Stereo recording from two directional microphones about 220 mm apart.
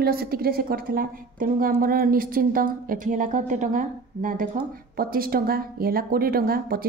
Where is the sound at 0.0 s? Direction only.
45° right (ahead or behind).